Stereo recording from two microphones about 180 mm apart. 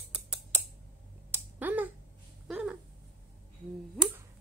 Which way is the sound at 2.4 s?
5° right (ahead or behind).